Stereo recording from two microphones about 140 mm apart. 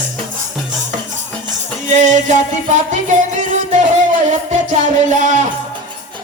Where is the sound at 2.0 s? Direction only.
60° right (ahead or behind).